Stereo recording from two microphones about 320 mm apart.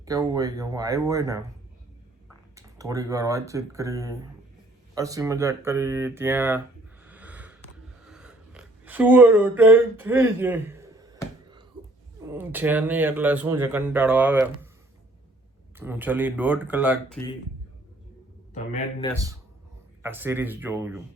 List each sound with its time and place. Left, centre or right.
0.0 s speech: centre
2.6 s speech: centre
7.0 s snort: centre
8.0 s a sound: centre
12.3 s speech: centre
15.8 s speech: centre
18.5 s speech: left
20.0 s speech: centre